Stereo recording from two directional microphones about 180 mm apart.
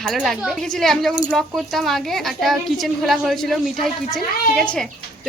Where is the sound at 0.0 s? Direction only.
Centre (ahead or behind).